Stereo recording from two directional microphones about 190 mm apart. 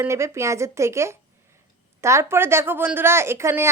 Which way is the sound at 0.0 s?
15° right (ahead or behind).